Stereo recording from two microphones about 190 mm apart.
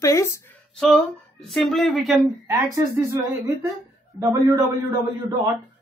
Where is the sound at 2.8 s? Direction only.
20° right (ahead or behind).